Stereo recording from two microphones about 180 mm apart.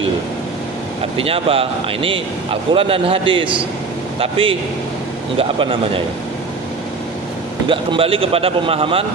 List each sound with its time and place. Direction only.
1.1 s a man's voice: 30° right (ahead or behind)
7.6 s speech: 30° right (ahead or behind)